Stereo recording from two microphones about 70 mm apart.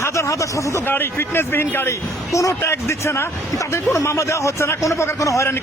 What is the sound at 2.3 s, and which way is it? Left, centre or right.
Speech, left.